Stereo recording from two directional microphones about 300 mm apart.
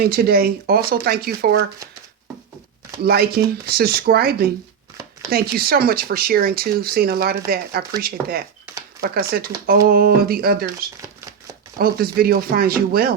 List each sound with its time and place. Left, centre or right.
0.0 s speech: right
3.0 s speech: right
11.8 s speech: right